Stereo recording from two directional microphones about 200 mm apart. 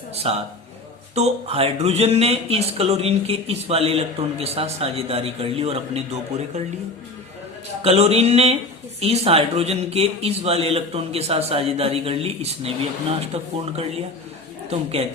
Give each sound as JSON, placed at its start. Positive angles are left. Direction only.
{"t": 0.2, "sound": "speech", "side_deg": -30}
{"t": 7.8, "sound": "speech", "side_deg": -30}